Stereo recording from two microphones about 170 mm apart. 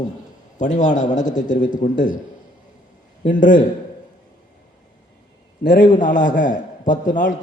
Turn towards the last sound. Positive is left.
turn(degrees=50)  # may be behind; listen again after turning